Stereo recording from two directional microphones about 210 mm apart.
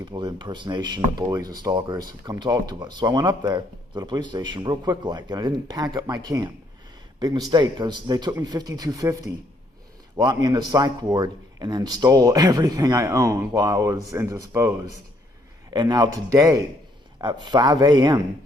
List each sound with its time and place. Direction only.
0.0 s a man's voice: 20° right (ahead or behind)